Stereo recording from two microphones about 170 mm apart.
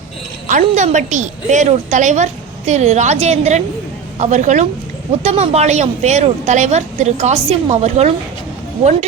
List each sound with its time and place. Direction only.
0.4 s a woman's voice: 45° right (ahead or behind)